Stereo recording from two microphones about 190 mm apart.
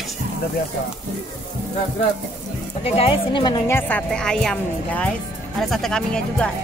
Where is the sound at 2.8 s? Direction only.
30° left (ahead or behind).